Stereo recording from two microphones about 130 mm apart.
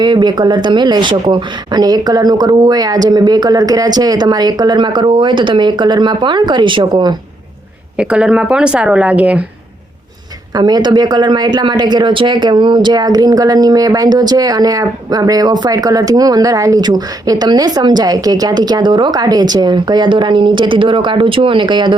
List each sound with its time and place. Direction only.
0.0 s speech: 35° right (ahead or behind)
7.9 s a woman's voice: 10° right (ahead or behind)
10.5 s speech: 30° right (ahead or behind)